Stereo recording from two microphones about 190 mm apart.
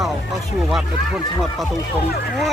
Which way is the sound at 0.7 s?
Centre (ahead or behind).